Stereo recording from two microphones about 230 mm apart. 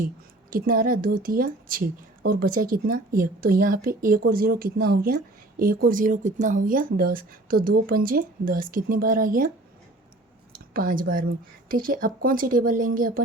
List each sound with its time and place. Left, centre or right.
0.5 s a woman's voice: right
10.8 s a woman's voice: right